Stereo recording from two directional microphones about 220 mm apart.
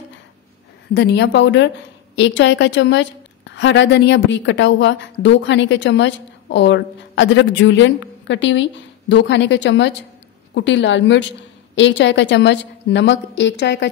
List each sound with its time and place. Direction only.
0.9 s a woman's voice: 50° left (ahead or behind)